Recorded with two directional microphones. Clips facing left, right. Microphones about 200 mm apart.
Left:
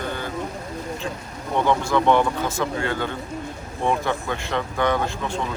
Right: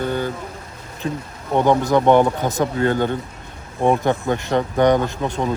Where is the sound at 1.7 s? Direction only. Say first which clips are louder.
Right 5 dB; 45° right (ahead or behind).